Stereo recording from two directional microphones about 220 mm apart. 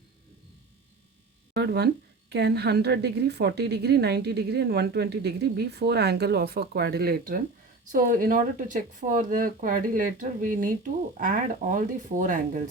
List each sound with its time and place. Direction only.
1.5 s a woman's voice: 50° right (ahead or behind)